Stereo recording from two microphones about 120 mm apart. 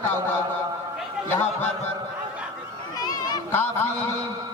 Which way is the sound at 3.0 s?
35° left (ahead or behind).